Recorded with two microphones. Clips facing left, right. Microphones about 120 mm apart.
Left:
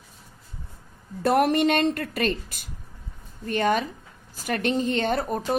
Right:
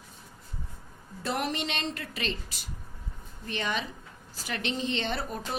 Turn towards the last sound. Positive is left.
turn(degrees=45)  # may be behind; listen again after turning